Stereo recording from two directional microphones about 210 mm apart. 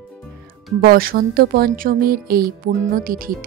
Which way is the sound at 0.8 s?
45° right (ahead or behind).